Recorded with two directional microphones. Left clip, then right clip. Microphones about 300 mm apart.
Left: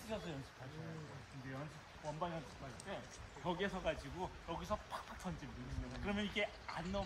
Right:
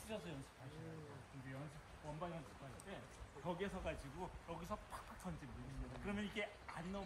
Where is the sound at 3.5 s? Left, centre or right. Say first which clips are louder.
Left 6 dB; centre.